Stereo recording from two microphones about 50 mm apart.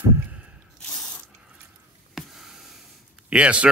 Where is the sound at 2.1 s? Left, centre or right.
Centre.